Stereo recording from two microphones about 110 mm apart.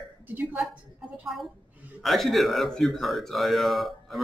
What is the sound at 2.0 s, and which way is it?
A man's voice, centre (ahead or behind).